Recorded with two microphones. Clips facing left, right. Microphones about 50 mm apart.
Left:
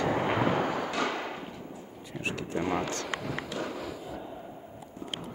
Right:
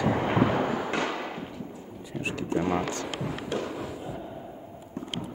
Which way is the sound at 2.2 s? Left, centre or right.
Right.